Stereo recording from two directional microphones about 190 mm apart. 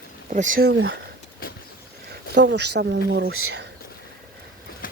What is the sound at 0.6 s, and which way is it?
Speech, 80° right.